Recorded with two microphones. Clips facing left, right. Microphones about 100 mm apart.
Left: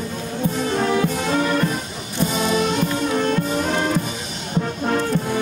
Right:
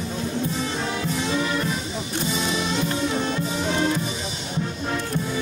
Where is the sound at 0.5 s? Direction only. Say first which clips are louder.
Left 7 dB; 50° left (ahead or behind).